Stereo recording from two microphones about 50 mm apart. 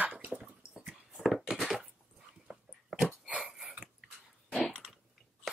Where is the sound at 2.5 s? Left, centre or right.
Centre.